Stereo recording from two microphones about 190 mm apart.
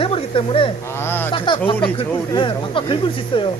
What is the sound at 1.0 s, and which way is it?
Speech, 10° left (ahead or behind).